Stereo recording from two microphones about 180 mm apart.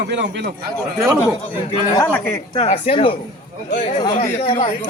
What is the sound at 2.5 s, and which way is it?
Speech, 30° left (ahead or behind).